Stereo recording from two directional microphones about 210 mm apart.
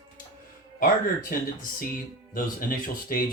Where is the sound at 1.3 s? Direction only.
40° left (ahead or behind).